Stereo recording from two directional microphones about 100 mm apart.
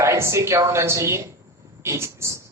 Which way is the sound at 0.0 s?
25° right (ahead or behind).